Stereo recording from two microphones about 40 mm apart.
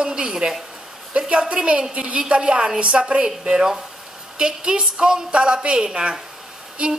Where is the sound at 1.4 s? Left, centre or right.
Right.